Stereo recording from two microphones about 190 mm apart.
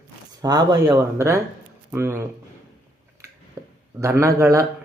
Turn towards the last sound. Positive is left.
turn(degrees=-15)  # may be behind; listen again after turning